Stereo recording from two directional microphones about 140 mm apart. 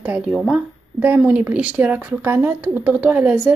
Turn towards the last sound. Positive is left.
turn(degrees=-15)  # may be behind; listen again after turning